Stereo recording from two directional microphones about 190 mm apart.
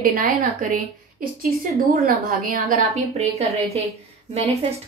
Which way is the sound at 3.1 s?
35° right (ahead or behind).